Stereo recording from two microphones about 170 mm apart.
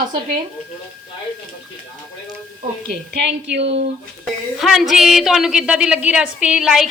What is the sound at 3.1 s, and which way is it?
Speech, 90° right.